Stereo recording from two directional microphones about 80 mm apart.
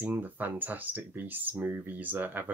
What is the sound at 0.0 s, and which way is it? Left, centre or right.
Speech, right.